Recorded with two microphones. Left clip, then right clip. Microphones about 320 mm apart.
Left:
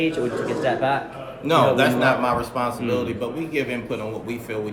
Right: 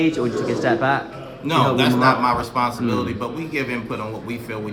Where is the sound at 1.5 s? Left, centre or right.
Centre.